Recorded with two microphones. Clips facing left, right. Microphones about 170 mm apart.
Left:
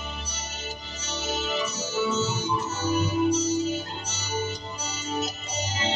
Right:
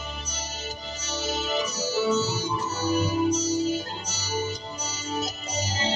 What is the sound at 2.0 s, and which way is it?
Music, 35° right (ahead or behind).